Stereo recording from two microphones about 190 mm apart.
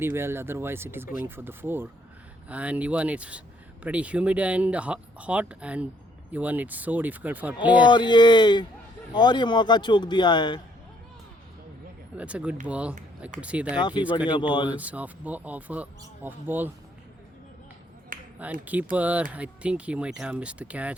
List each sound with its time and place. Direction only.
0.0 s speech: 10° right (ahead or behind)
7.9 s speech: 25° left (ahead or behind)
12.1 s speech: 5° right (ahead or behind)
13.7 s speech: 25° left (ahead or behind)
14.0 s speech: 5° right (ahead or behind)
18.1 s a sound: 45° right (ahead or behind)
18.6 s speech: 10° right (ahead or behind)